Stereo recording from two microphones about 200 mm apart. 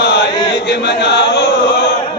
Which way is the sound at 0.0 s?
60° left (ahead or behind).